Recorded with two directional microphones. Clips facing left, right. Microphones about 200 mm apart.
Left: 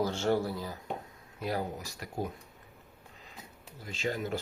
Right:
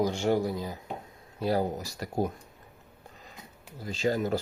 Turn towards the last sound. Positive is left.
turn(degrees=-40)  # may be behind; listen again after turning